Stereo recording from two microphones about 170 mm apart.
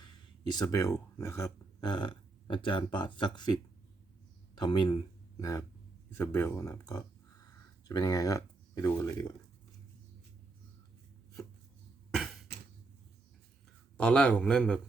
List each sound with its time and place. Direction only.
0.4 s speech: 20° left (ahead or behind)
4.5 s speech: 25° left (ahead or behind)
12.1 s cough: centre (ahead or behind)
14.0 s a man's voice: 5° left (ahead or behind)